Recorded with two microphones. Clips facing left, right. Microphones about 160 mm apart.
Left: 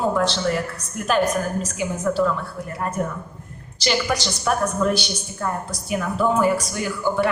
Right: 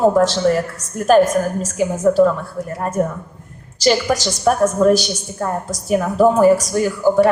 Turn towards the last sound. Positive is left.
turn(degrees=-40)  # may be behind; listen again after turning